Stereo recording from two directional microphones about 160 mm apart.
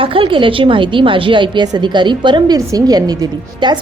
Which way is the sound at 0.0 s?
35° right (ahead or behind).